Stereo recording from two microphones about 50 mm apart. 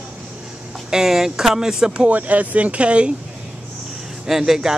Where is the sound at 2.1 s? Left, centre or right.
Right.